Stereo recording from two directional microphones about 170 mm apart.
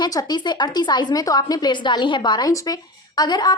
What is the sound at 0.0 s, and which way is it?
A woman's voice, 25° left (ahead or behind).